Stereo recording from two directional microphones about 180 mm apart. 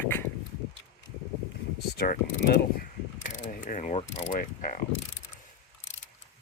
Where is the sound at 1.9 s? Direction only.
60° left (ahead or behind).